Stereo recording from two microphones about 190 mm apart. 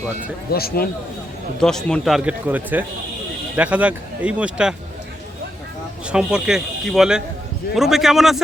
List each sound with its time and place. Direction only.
0.5 s speech: 55° left (ahead or behind)
1.6 s a man's voice: 5° left (ahead or behind)
6.1 s a man's voice: 5° right (ahead or behind)